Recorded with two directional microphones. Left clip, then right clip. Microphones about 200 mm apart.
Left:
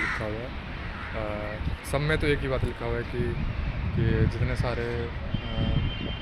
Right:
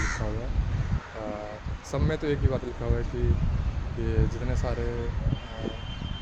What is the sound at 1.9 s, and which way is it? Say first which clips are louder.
Speech: left 3 dB; 25° right (ahead or behind).